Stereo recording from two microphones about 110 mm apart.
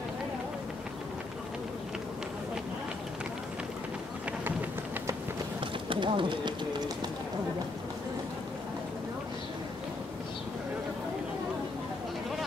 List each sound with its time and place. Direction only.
5.6 s bird: 50° right (ahead or behind)